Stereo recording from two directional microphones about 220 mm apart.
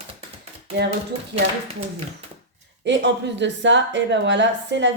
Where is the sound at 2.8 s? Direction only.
55° right (ahead or behind).